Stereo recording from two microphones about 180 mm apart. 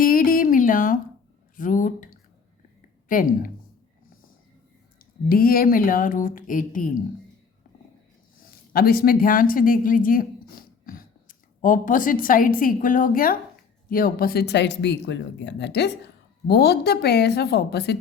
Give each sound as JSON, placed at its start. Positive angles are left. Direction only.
{"t": 0.0, "sound": "music", "side_deg": 50}
{"t": 1.5, "sound": "a sound", "side_deg": 50}
{"t": 3.1, "sound": "speech", "side_deg": 50}
{"t": 4.9, "sound": "speech", "side_deg": 55}
{"t": 8.4, "sound": "a woman's voice", "side_deg": 55}